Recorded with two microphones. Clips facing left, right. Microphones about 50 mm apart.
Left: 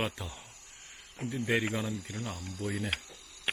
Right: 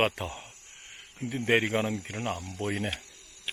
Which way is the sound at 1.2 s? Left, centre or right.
Right.